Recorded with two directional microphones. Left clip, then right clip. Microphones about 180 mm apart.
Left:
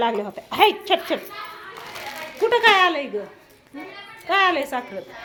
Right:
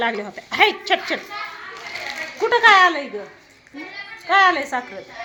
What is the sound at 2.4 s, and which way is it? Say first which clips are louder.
Speech: right 3 dB; centre (ahead or behind).